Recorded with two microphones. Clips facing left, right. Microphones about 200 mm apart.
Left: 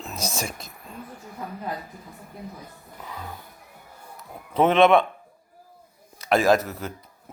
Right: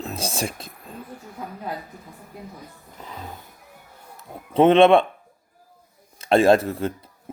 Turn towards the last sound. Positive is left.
turn(degrees=-30)  # may be behind; listen again after turning